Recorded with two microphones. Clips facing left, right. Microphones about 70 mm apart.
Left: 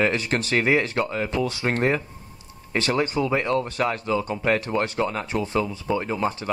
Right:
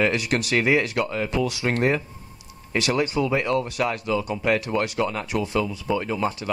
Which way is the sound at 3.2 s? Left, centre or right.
Centre.